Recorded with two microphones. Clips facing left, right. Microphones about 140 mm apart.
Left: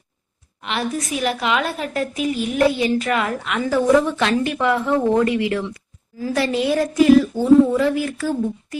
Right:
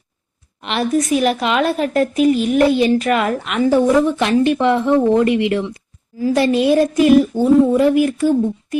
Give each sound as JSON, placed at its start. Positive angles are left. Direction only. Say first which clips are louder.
{"t": 0.6, "sound": "a woman's voice", "louder": "right 6 dB", "side_deg": -20}
{"t": 2.0, "sound": "speech", "louder": "right 8 dB", "side_deg": -70}
{"t": 3.0, "sound": "a woman's voice", "louder": "right 4 dB", "side_deg": -20}